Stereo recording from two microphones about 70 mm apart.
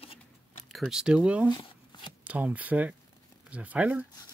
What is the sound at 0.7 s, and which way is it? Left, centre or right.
Speech, centre.